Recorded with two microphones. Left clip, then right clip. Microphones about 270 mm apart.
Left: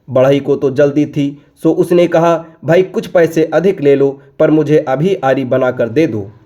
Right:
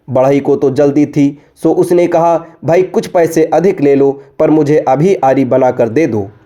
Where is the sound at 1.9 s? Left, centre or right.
Centre.